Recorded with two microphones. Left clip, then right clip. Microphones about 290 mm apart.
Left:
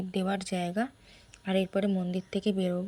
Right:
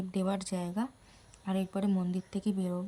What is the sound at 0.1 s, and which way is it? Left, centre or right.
Speech, centre.